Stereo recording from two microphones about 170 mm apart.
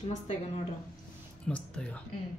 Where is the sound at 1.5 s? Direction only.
5° left (ahead or behind).